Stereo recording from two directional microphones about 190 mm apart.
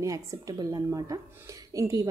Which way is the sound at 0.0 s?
15° right (ahead or behind).